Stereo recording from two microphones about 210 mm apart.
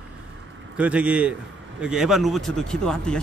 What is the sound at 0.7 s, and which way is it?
Speech, 5° right (ahead or behind).